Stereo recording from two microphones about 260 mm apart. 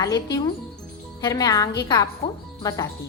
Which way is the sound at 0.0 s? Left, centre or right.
Centre.